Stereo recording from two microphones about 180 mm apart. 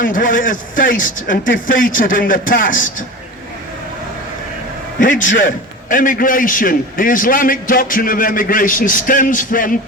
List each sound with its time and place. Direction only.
0.0 s a man's voice: 50° left (ahead or behind)
4.9 s a man's voice: 45° left (ahead or behind)